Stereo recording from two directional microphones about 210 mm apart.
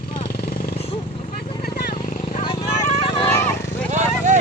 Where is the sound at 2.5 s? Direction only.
25° left (ahead or behind).